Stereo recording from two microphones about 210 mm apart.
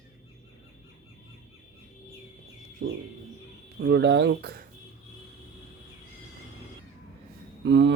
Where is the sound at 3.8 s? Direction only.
55° right (ahead or behind).